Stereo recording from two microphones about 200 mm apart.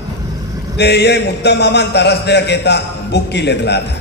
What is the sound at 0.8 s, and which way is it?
A man's voice, 55° left (ahead or behind).